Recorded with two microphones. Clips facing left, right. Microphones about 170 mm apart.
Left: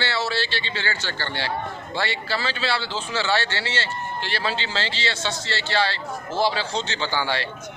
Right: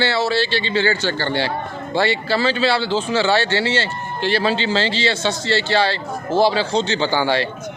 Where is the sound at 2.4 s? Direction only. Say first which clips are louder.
Right 11 dB; 30° right (ahead or behind).